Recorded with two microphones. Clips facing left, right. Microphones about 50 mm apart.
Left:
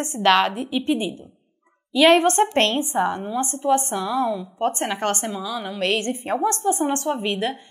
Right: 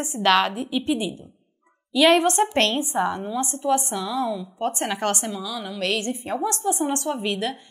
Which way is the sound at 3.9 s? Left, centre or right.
Left.